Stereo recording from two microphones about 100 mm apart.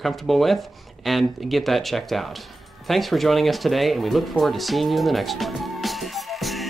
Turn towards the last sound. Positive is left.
turn(degrees=0)  # may be behind; listen again after turning